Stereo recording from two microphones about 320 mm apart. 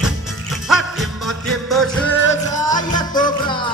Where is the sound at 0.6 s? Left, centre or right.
Centre.